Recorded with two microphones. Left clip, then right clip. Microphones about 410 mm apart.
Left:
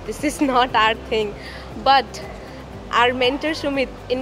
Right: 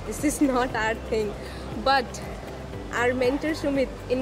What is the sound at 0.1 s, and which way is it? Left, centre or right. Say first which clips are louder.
Speech: left 5 dB; left.